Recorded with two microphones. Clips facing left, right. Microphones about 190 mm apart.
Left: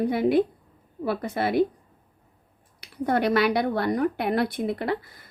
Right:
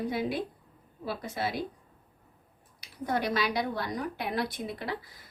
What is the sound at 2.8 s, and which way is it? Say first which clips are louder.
Speech: left 7 dB; 60° left (ahead or behind).